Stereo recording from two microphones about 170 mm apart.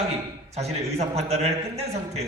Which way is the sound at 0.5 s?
40° right (ahead or behind).